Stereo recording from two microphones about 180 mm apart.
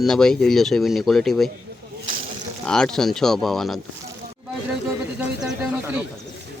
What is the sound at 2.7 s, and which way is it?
Speech, 5° left (ahead or behind).